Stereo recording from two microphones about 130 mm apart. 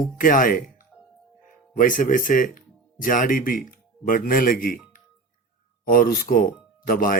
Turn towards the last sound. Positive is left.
turn(degrees=90)